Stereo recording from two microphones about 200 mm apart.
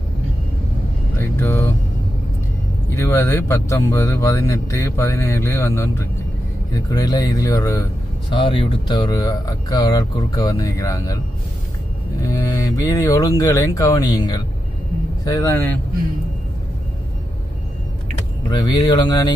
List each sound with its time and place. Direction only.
1.2 s vehicle: 10° left (ahead or behind)
2.9 s speech: 15° left (ahead or behind)
12.2 s speech: 15° left (ahead or behind)
18.4 s speech: 20° left (ahead or behind)